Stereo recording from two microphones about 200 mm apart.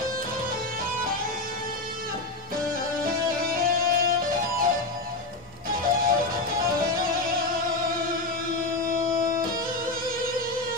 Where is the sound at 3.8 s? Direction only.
45° right (ahead or behind).